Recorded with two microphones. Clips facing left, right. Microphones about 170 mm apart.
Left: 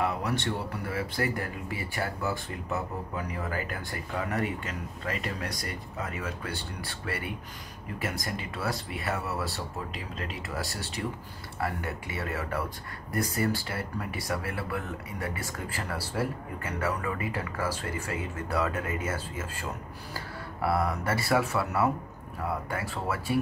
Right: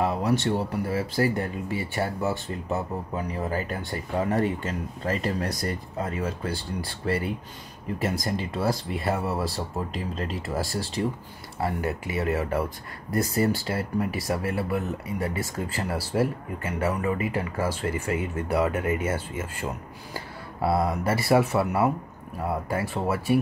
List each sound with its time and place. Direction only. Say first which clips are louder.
0.0 s speech: right 5 dB; 25° right (ahead or behind)